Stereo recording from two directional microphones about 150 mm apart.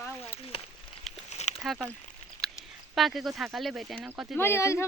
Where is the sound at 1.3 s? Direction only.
50° left (ahead or behind).